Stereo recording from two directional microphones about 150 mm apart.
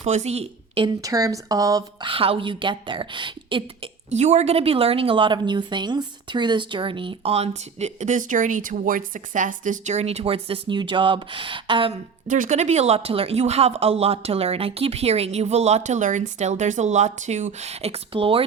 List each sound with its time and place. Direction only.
0.0 s a woman's voice: 50° right (ahead or behind)
1.0 s a woman's voice: 25° right (ahead or behind)
4.1 s a woman's voice: 50° right (ahead or behind)
12.3 s speech: 55° right (ahead or behind); by 18.4 s 35° right (ahead or behind)